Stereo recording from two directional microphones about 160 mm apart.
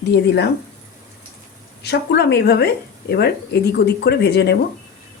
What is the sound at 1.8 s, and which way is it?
Speech, 90° left.